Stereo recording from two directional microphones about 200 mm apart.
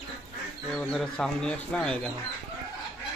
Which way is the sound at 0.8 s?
5° left (ahead or behind).